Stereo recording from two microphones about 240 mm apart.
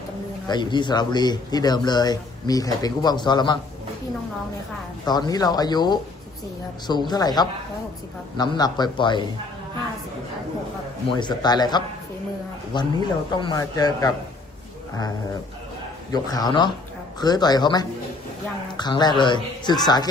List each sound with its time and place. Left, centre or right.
0.4 s a man's voice: centre
5.0 s a man's voice: centre
7.1 s a man's voice: centre
11.1 s a man's voice: centre
16.1 s a man's voice: centre